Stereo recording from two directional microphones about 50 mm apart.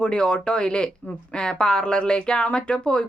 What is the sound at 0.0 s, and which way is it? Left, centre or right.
A woman's voice, centre.